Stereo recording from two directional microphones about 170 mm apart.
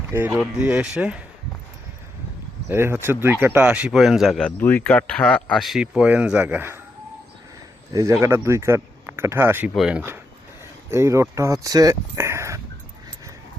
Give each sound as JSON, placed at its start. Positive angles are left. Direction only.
{"t": 0.1, "sound": "speech", "side_deg": -10}
{"t": 2.6, "sound": "speech", "side_deg": -15}
{"t": 8.2, "sound": "speech", "side_deg": -15}
{"t": 10.9, "sound": "speech", "side_deg": -15}